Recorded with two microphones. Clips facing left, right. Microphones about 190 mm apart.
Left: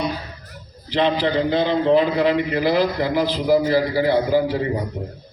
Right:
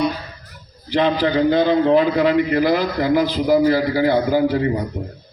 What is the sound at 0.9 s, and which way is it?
A man's voice, 50° right (ahead or behind).